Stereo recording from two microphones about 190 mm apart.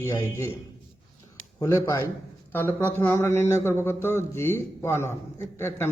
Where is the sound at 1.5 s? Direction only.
20° left (ahead or behind).